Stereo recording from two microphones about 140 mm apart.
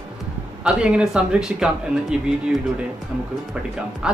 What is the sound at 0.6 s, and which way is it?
Speech, 5° right (ahead or behind).